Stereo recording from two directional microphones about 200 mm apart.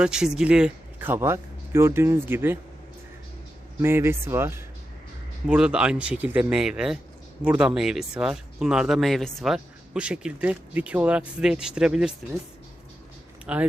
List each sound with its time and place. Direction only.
0.0 s speech: 5° right (ahead or behind)
3.8 s speech: 10° right (ahead or behind)
13.4 s speech: 5° right (ahead or behind)